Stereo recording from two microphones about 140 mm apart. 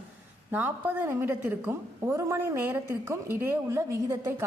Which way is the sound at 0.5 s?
15° right (ahead or behind).